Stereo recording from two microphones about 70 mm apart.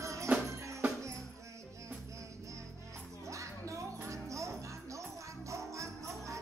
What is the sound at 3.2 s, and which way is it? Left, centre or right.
Music, right.